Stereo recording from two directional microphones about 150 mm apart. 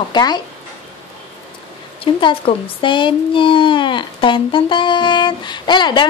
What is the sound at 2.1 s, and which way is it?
A child's voice, 35° left (ahead or behind).